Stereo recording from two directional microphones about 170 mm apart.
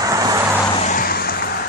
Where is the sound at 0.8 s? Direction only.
50° left (ahead or behind).